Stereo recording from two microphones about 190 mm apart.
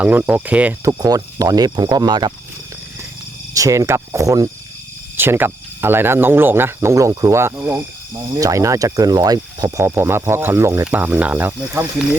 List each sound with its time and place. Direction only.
0.0 s speech: 5° right (ahead or behind)
0.9 s speech: 20° right (ahead or behind)
3.5 s speech: 15° right (ahead or behind)